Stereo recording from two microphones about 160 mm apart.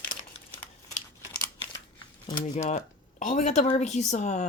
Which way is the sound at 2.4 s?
45° left (ahead or behind).